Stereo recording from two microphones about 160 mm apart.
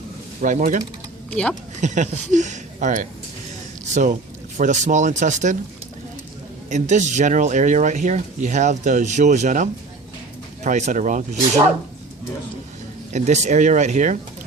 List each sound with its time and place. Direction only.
0.4 s speech: 50° right (ahead or behind)
1.3 s speech: 5° left (ahead or behind)
1.8 s speech: 50° right (ahead or behind)
6.7 s speech: 45° right (ahead or behind)
13.1 s speech: 45° right (ahead or behind)